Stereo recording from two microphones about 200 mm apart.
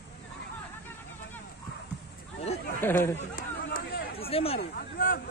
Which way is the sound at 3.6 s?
50° left (ahead or behind).